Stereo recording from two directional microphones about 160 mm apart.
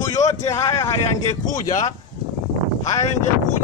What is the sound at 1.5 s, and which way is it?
Speech, 50° left (ahead or behind).